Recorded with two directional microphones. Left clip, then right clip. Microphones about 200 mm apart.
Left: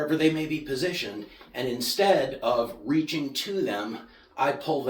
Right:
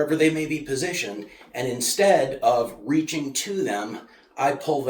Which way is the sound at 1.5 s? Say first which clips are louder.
Right 3 dB; 25° right (ahead or behind).